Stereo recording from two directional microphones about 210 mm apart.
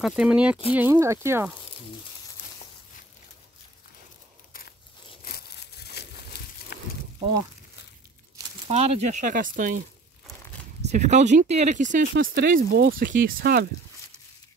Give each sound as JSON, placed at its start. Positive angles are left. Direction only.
{"t": 0.0, "sound": "speech", "side_deg": -5}
{"t": 6.0, "sound": "a sound", "side_deg": 50}
{"t": 8.6, "sound": "speech", "side_deg": -30}
{"t": 10.9, "sound": "speech", "side_deg": -35}